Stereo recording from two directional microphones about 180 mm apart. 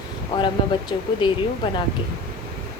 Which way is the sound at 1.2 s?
25° left (ahead or behind).